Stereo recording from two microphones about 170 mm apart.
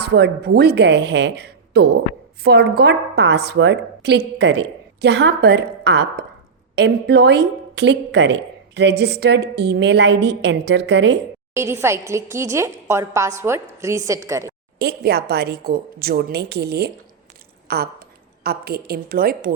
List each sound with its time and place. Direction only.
0.0 s a woman's voice: 75° right (ahead or behind); by 11.2 s 90° right
11.5 s a woman's voice: 15° right (ahead or behind)
14.8 s a woman's voice: 70° right (ahead or behind)